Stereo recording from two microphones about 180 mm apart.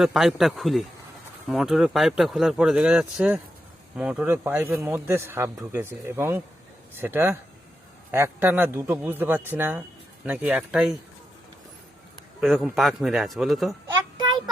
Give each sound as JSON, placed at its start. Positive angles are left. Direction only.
{"t": 0.0, "sound": "a man's voice", "side_deg": 0}
{"t": 12.4, "sound": "speech", "side_deg": 0}
{"t": 14.2, "sound": "child singing", "side_deg": -25}